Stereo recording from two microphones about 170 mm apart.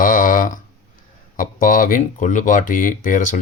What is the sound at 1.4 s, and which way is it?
Speech, 50° left (ahead or behind).